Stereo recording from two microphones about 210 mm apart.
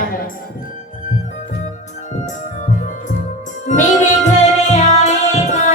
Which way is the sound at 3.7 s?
35° left (ahead or behind).